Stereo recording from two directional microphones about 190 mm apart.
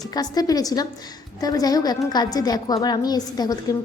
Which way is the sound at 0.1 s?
20° left (ahead or behind).